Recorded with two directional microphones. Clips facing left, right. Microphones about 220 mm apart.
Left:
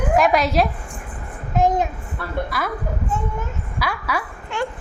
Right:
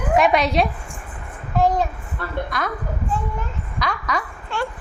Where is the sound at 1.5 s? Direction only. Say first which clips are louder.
Even; 20° left (ahead or behind).